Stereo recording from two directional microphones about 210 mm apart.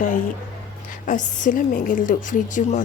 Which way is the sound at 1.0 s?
40° left (ahead or behind).